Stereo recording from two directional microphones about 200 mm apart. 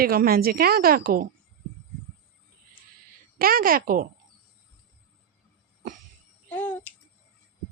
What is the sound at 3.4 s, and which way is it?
Speech, 45° right (ahead or behind).